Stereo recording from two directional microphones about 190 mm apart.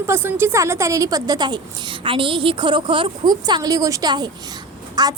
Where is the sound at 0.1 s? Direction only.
10° right (ahead or behind).